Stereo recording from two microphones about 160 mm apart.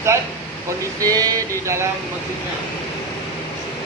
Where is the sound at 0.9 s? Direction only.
20° right (ahead or behind).